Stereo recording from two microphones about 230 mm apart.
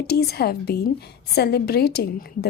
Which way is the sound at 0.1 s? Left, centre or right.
Left.